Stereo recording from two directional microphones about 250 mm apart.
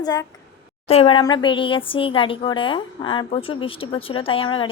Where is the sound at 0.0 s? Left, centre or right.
Centre.